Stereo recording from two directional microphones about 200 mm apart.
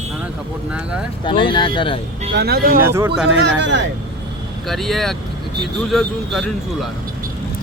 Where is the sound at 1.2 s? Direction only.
25° left (ahead or behind).